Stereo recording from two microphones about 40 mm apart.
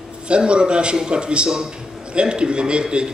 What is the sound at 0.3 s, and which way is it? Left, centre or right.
A man's voice, right.